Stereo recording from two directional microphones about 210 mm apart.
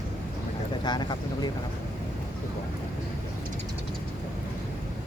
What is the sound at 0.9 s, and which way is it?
Speech, 20° left (ahead or behind).